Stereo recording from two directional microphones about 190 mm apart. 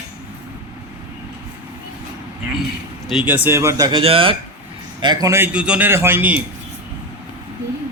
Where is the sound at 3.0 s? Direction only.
5° right (ahead or behind).